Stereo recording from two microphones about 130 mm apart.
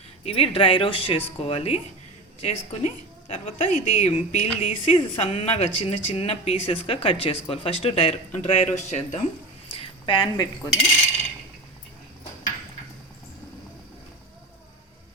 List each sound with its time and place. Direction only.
0.3 s a woman's voice: 45° left (ahead or behind)
3.7 s speech: 90° left
4.0 s a woman's voice: 60° left (ahead or behind)
4.9 s speech: 45° left (ahead or behind)
9.7 s speech: 40° left (ahead or behind)